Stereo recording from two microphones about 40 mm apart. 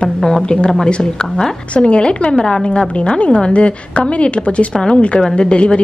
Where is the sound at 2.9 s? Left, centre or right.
Left.